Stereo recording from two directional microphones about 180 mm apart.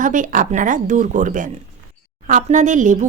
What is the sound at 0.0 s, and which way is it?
A woman's voice, 45° right (ahead or behind).